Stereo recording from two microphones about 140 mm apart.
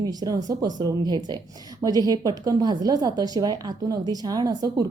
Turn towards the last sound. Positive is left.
turn(degrees=-30)  # may be behind; listen again after turning